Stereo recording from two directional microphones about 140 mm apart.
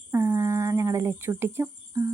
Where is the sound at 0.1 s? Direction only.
20° right (ahead or behind).